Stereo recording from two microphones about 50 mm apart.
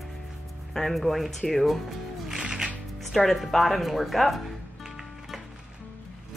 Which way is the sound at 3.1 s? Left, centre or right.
Centre.